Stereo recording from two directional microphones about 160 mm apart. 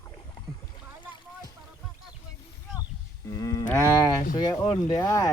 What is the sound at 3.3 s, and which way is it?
Speech, 20° left (ahead or behind).